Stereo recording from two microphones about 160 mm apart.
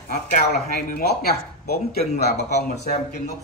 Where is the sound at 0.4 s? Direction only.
70° left (ahead or behind).